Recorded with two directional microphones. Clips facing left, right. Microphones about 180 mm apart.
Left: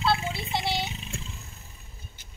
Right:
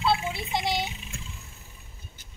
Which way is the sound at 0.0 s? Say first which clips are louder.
Right 1 dB; 15° right (ahead or behind).